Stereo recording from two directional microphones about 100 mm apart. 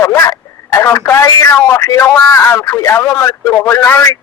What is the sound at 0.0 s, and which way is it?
A man's voice, 30° left (ahead or behind).